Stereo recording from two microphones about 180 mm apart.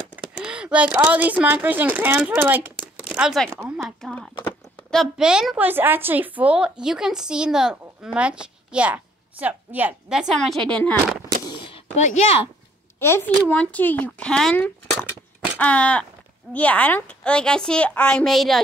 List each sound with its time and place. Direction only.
0.1 s speech: 5° right (ahead or behind)
3.4 s speech: 15° right (ahead or behind)
3.7 s a woman's voice: centre (ahead or behind)
11.4 s gunshot: 25° left (ahead or behind)
13.0 s speech: 10° left (ahead or behind)